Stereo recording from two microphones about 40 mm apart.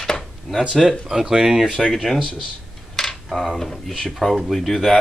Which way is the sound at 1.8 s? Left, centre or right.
Centre.